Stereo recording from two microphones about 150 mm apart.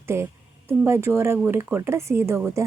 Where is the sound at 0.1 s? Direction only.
15° right (ahead or behind).